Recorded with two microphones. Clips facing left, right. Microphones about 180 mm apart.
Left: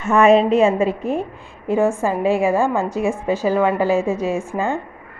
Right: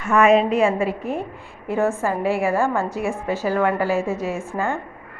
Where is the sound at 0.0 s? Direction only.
25° left (ahead or behind).